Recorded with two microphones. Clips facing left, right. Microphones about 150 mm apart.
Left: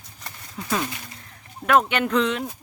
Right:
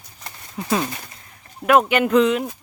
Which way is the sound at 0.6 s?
30° right (ahead or behind).